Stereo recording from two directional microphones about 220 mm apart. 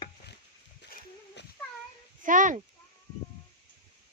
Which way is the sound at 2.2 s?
35° right (ahead or behind).